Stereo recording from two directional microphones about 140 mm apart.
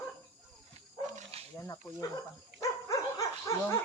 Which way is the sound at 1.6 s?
25° left (ahead or behind).